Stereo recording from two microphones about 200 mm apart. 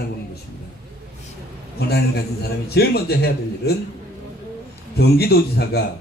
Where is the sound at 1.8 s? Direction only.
55° left (ahead or behind).